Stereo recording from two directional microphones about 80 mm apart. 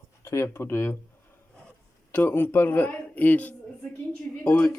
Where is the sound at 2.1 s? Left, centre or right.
Left.